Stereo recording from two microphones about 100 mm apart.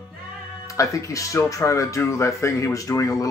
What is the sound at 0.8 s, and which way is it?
Speech, 30° left (ahead or behind).